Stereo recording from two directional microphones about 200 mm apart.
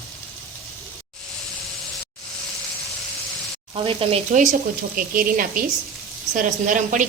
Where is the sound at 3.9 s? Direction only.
30° right (ahead or behind).